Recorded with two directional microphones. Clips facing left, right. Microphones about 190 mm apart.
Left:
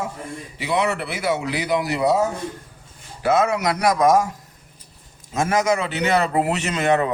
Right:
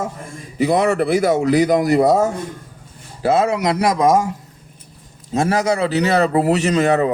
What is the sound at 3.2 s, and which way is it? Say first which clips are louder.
Speech: right 3 dB; 30° right (ahead or behind).